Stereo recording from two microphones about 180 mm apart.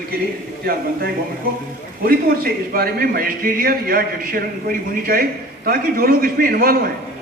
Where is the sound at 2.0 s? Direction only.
55° right (ahead or behind).